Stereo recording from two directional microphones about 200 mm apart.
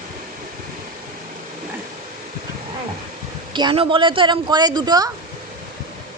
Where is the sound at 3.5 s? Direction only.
25° right (ahead or behind).